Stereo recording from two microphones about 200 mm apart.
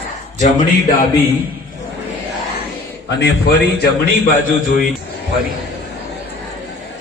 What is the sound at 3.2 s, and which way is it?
Speech, 55° left (ahead or behind).